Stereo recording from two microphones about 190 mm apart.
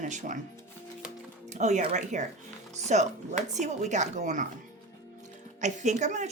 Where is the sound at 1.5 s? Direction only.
40° right (ahead or behind).